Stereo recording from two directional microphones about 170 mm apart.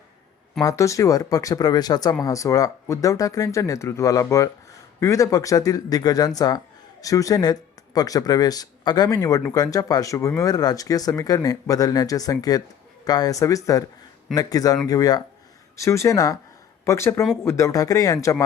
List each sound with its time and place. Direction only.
0.6 s speech: 20° left (ahead or behind)